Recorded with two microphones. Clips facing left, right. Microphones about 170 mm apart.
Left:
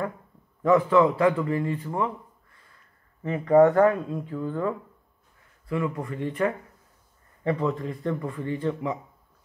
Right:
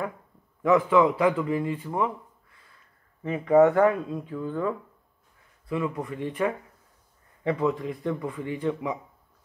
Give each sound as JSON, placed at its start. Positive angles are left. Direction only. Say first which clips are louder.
{"t": 0.6, "sound": "a man's voice", "louder": "left 1 dB", "side_deg": -5}
{"t": 0.9, "sound": "speech", "louder": "left 1 dB", "side_deg": -15}
{"t": 3.3, "sound": "speech", "louder": "left 1 dB", "side_deg": -10}
{"t": 4.4, "sound": "speech", "louder": "even", "side_deg": 0}
{"t": 5.7, "sound": "speech", "louder": "left 1 dB", "side_deg": -20}